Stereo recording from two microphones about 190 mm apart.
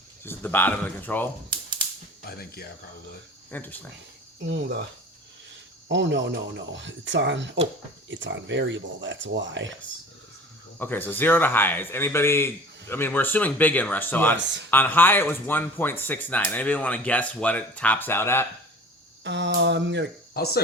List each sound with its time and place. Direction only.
0.3 s speech: 10° left (ahead or behind)
2.3 s speech: 55° left (ahead or behind)
3.5 s speech: 10° left (ahead or behind)
5.9 s speech: 70° right (ahead or behind)
10.8 s speech: 10° left (ahead or behind)
19.2 s speech: 65° right (ahead or behind)
20.3 s speech: 55° left (ahead or behind)